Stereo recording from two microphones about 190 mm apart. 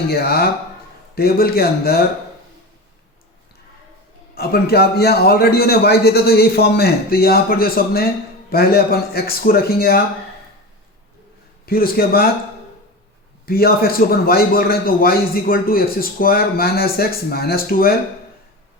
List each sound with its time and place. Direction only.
0.1 s a man's voice: 55° left (ahead or behind)
4.4 s a man's voice: 55° left (ahead or behind)
11.6 s a man's voice: 50° left (ahead or behind)
13.4 s a man's voice: 50° left (ahead or behind)